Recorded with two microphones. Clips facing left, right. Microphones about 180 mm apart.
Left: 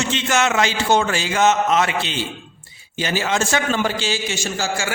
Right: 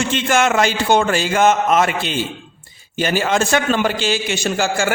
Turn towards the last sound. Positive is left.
turn(degrees=-55)  # may be behind; listen again after turning